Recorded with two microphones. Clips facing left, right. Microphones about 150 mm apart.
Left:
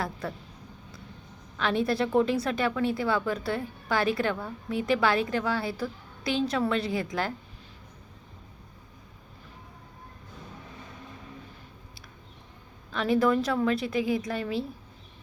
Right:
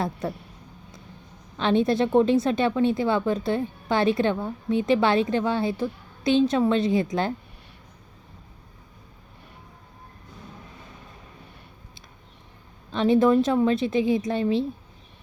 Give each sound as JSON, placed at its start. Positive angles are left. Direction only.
{"t": 1.5, "sound": "a woman's voice", "side_deg": -25}
{"t": 12.9, "sound": "a woman's voice", "side_deg": -25}